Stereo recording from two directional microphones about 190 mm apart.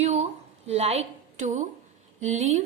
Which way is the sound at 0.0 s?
35° right (ahead or behind).